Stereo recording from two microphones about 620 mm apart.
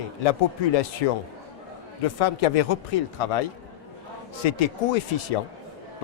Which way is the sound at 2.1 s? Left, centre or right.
Left.